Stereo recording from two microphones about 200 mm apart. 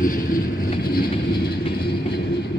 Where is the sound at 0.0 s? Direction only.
45° left (ahead or behind).